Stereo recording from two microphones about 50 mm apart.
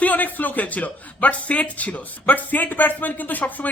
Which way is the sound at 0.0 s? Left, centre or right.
Left.